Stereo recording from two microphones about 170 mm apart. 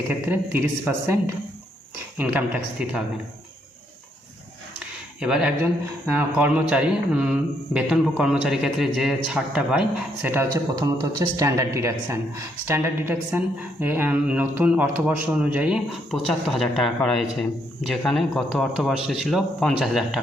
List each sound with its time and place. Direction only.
0.1 s speech: 10° right (ahead or behind)
5.2 s a man's voice: 5° right (ahead or behind)
10.8 s a man's voice: 20° right (ahead or behind); by 20.2 s centre (ahead or behind)